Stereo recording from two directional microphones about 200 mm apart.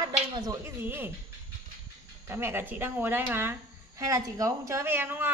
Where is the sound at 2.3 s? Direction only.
10° right (ahead or behind).